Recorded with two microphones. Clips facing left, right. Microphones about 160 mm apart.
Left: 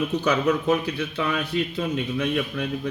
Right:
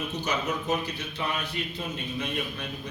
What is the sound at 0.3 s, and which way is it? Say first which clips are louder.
A man's voice: left 7 dB; 65° left (ahead or behind).